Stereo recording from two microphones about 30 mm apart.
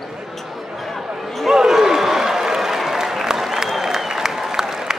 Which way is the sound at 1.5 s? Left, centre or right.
Centre.